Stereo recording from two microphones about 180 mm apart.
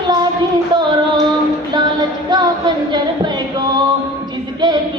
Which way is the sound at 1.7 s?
25° right (ahead or behind).